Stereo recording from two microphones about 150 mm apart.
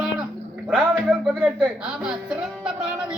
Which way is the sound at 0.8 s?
5° right (ahead or behind).